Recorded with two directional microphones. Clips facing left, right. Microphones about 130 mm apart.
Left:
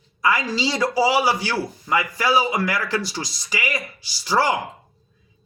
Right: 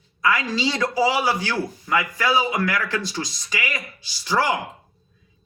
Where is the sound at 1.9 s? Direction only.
20° left (ahead or behind).